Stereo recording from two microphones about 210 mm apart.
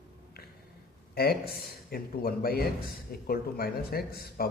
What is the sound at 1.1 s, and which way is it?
A man's voice, 45° left (ahead or behind).